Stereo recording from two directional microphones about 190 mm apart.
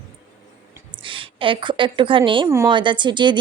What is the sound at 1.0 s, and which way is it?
A woman's voice, 25° right (ahead or behind).